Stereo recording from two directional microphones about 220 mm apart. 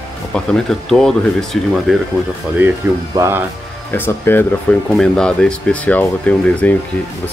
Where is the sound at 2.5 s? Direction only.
10° right (ahead or behind).